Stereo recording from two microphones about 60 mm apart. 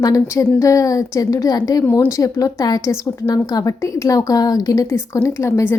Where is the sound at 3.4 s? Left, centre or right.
Left.